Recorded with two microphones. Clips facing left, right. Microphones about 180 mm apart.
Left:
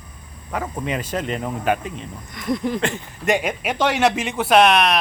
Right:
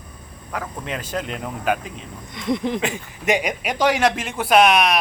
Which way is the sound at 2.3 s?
25° right (ahead or behind).